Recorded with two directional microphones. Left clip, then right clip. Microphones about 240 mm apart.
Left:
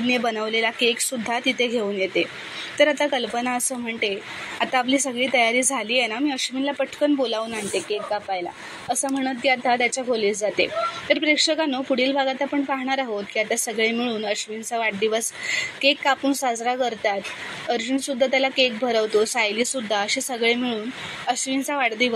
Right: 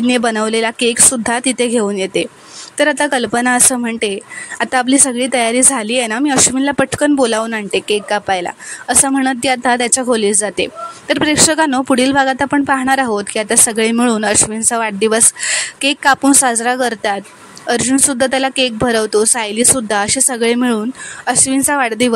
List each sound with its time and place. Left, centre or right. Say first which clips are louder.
0.0 s speech: right 8 dB; right